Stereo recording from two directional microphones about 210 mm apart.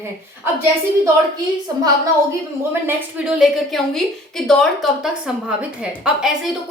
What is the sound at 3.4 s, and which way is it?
A woman's voice, centre (ahead or behind).